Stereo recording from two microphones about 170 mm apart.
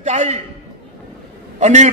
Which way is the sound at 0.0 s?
45° right (ahead or behind).